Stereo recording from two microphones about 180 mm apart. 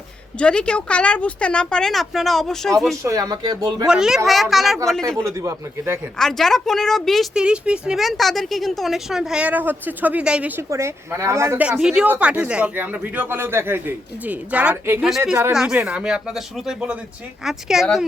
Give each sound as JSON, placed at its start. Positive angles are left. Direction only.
{"t": 0.3, "sound": "speech", "side_deg": 5}
{"t": 3.0, "sound": "speech", "side_deg": -20}
{"t": 3.8, "sound": "speech", "side_deg": -5}
{"t": 5.0, "sound": "speech", "side_deg": -15}
{"t": 6.1, "sound": "speech", "side_deg": 0}